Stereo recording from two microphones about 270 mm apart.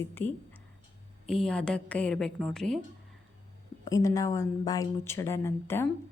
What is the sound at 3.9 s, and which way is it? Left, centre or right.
A woman's voice, centre.